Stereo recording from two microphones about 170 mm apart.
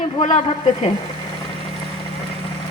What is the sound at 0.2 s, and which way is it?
Speech, 40° left (ahead or behind).